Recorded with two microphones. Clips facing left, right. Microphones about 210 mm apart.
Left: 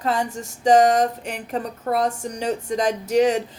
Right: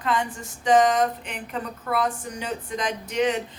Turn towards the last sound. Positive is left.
turn(degrees=45)  # may be behind; listen again after turning